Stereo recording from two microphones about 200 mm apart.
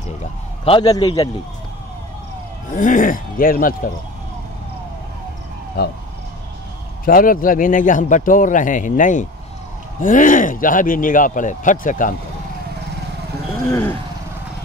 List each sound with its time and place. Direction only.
0.2 s a man's voice: 25° left (ahead or behind)
2.7 s speech: 40° left (ahead or behind)
7.1 s a man's voice: 45° left (ahead or behind)
13.7 s speech: 15° left (ahead or behind)